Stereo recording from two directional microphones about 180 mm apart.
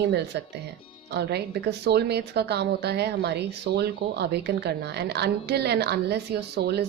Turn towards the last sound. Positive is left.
turn(degrees=-65)  # may be behind; listen again after turning